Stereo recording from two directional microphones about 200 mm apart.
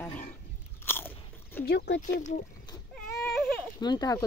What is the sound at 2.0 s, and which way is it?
Speech, 40° left (ahead or behind).